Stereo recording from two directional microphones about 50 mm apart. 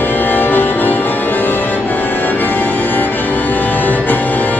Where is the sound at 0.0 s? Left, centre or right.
Left.